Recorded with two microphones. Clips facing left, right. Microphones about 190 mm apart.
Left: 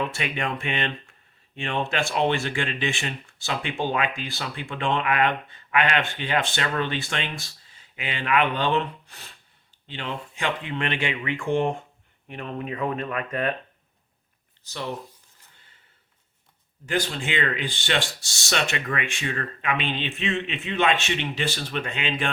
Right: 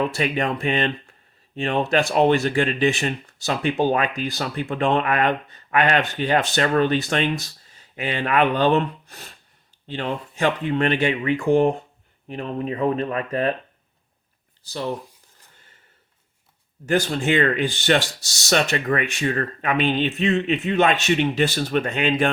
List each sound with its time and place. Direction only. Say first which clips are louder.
0.0 s speech: right 6 dB; 40° right (ahead or behind)
14.6 s speech: right 5 dB; 35° right (ahead or behind)
16.8 s speech: right 6 dB; 45° right (ahead or behind)